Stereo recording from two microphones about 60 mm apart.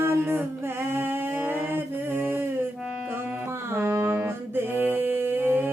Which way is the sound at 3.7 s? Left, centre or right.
Right.